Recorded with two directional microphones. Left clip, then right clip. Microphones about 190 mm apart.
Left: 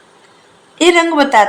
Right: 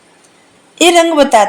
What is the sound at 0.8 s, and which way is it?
Speech, 45° right (ahead or behind).